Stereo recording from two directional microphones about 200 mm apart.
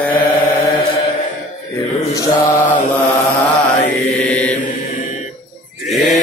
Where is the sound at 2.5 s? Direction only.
40° left (ahead or behind).